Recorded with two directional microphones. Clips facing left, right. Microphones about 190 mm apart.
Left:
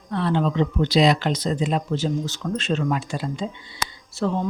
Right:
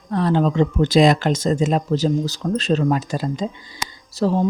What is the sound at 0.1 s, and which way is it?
Speech, 40° right (ahead or behind).